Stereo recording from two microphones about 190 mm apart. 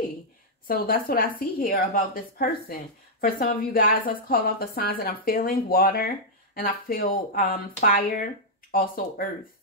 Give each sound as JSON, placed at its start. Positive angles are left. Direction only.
{"t": 0.7, "sound": "a woman's voice", "side_deg": 50}